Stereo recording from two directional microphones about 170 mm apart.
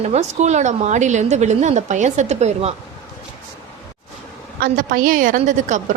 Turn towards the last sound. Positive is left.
turn(degrees=-45)  # may be behind; listen again after turning